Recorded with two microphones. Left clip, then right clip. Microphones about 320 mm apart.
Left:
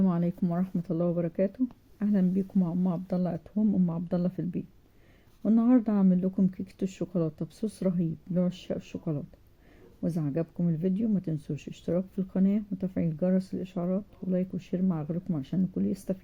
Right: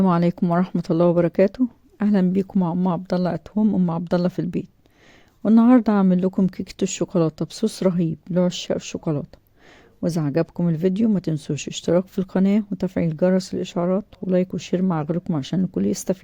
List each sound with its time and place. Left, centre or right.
0.0 s speech: right